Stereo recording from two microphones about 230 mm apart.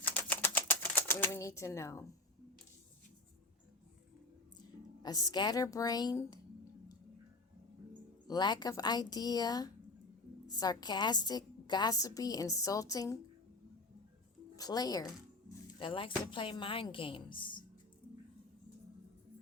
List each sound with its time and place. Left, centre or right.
0.0 s typewriter: centre
5.0 s a woman's voice: centre
8.3 s a woman's voice: centre
14.5 s speech: centre